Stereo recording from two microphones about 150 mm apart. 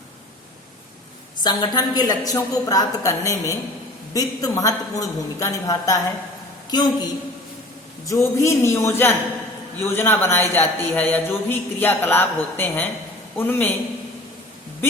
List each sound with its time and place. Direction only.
1.5 s a woman's voice: 25° left (ahead or behind)
8.0 s a woman's voice: 20° left (ahead or behind)